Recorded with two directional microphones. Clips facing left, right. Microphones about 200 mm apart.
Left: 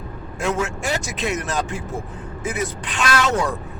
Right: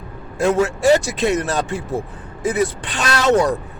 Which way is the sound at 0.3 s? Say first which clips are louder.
Right 7 dB; 35° right (ahead or behind).